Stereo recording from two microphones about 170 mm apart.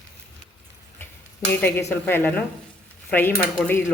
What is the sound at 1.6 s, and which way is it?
Speech, 10° left (ahead or behind).